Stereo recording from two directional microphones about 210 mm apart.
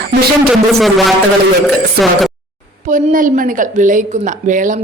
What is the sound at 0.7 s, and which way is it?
Speech, centre (ahead or behind).